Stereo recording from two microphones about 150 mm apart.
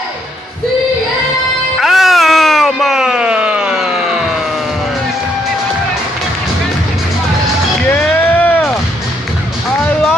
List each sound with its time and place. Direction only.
1.8 s music: centre (ahead or behind)
7.9 s music: 15° left (ahead or behind)